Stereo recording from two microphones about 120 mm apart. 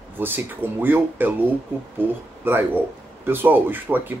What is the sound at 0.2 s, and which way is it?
Speech, 15° right (ahead or behind).